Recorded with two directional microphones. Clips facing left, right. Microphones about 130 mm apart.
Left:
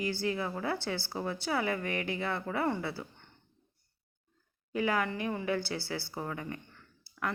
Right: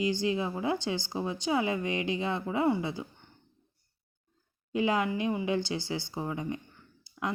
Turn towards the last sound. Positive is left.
turn(degrees=-15)  # may be behind; listen again after turning